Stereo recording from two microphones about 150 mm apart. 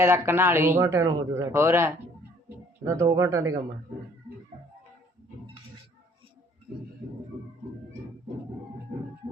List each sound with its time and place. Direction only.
0.0 s a man's voice: 15° right (ahead or behind)